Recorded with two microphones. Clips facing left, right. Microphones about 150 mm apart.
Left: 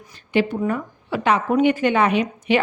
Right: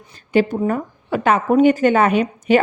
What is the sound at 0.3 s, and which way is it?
A woman's voice, 40° right (ahead or behind).